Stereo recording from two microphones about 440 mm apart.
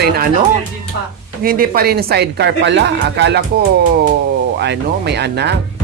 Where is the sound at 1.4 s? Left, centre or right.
Centre.